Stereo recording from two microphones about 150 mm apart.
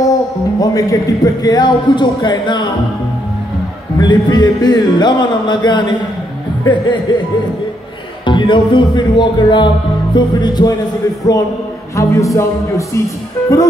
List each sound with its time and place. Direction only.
0.6 s speech: 25° left (ahead or behind)
4.0 s speech: 30° left (ahead or behind)
6.6 s music: 30° left (ahead or behind)
8.3 s music: 30° left (ahead or behind)
10.1 s speech: 30° left (ahead or behind)